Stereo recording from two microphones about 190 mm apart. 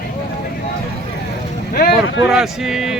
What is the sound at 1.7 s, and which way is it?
Speech, 50° left (ahead or behind).